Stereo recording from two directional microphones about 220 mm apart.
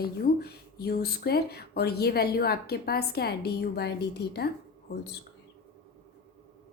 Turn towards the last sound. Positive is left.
turn(degrees=50)  # may be behind; listen again after turning